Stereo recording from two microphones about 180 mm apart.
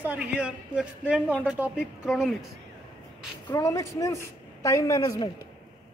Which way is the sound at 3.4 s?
20° left (ahead or behind).